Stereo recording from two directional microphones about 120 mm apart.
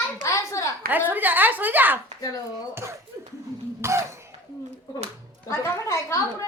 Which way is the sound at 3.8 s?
25° right (ahead or behind).